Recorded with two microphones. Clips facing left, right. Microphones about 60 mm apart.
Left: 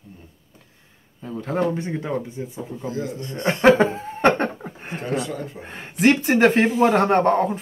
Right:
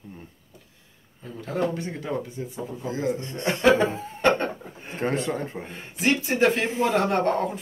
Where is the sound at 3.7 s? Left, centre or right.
Left.